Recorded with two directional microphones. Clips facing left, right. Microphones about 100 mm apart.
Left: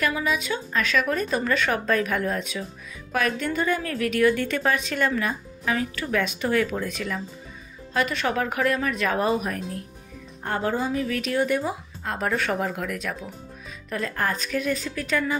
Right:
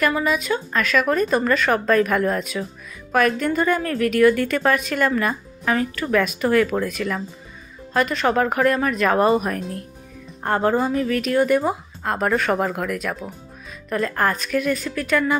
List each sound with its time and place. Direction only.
0.0 s speech: 50° right (ahead or behind)
7.9 s a woman's voice: 45° right (ahead or behind)